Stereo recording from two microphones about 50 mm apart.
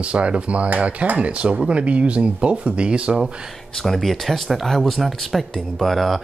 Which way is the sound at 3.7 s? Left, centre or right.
Centre.